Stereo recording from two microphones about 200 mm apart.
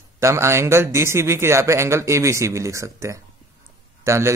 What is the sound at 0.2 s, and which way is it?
Speech, 15° right (ahead or behind).